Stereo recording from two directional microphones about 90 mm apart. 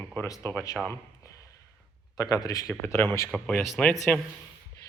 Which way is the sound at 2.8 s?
25° left (ahead or behind).